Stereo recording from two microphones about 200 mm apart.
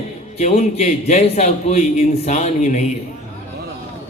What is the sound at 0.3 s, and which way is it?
A man's voice, 35° left (ahead or behind).